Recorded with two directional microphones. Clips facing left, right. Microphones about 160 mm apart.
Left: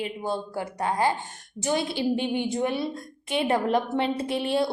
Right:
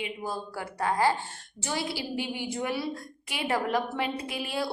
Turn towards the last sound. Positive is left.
turn(degrees=30)  # may be behind; listen again after turning